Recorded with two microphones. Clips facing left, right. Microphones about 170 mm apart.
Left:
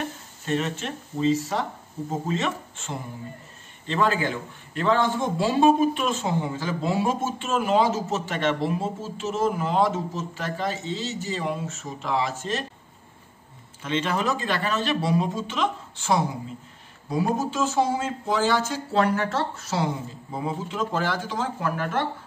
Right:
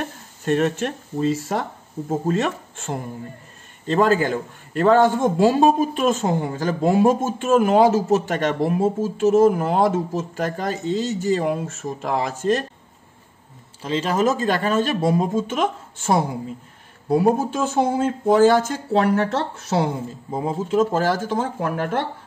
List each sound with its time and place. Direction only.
0.5 s a man's voice: 50° right (ahead or behind)
13.8 s a man's voice: 35° right (ahead or behind); by 19.9 s 60° right (ahead or behind)
20.3 s a man's voice: 40° right (ahead or behind)